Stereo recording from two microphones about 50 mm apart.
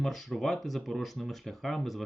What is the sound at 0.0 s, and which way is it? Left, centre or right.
Speech, centre.